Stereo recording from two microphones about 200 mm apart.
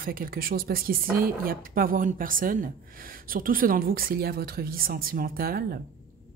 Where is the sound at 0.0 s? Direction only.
45° right (ahead or behind).